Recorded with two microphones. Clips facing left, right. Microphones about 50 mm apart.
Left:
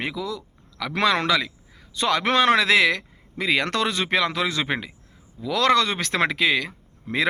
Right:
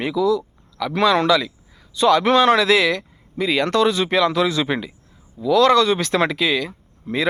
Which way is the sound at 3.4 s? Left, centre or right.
Left.